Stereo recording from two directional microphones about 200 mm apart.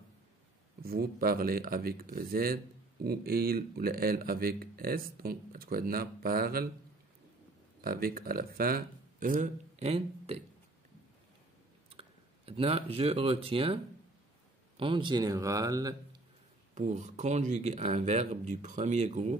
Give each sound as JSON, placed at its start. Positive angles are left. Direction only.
{"t": 0.8, "sound": "speech", "side_deg": -50}
{"t": 7.8, "sound": "speech", "side_deg": -45}
{"t": 9.8, "sound": "speech", "side_deg": -30}
{"t": 11.9, "sound": "speech", "side_deg": -30}
{"t": 14.8, "sound": "speech", "side_deg": -25}
{"t": 16.7, "sound": "speech", "side_deg": -35}